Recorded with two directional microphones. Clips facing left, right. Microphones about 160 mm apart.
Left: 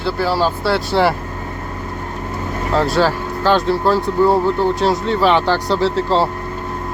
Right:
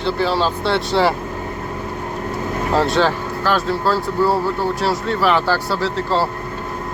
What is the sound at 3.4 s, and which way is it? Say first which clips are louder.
Speech: left 4 dB; 25° left (ahead or behind).